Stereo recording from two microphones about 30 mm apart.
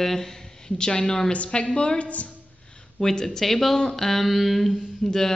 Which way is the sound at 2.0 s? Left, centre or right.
Left.